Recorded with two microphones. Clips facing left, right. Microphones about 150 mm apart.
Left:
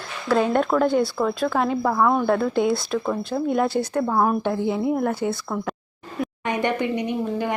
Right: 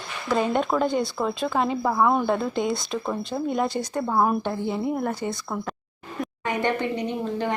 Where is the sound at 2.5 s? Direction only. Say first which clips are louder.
Left 4 dB; 5° left (ahead or behind).